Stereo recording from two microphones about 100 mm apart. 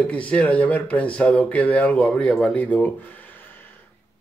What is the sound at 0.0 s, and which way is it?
Speech, 15° left (ahead or behind).